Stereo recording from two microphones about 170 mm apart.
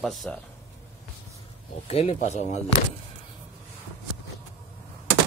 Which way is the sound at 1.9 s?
40° left (ahead or behind).